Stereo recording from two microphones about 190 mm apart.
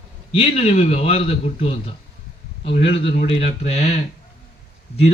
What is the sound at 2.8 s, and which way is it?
A man's voice, 30° left (ahead or behind).